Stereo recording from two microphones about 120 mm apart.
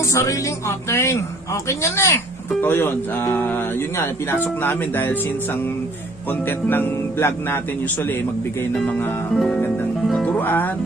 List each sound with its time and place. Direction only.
0.1 s a man's voice: 25° left (ahead or behind)
6.4 s speech: 15° left (ahead or behind)
8.7 s music: 5° left (ahead or behind)
10.2 s speech: 15° left (ahead or behind)